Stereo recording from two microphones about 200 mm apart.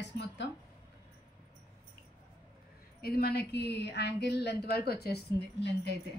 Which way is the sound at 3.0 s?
50° left (ahead or behind).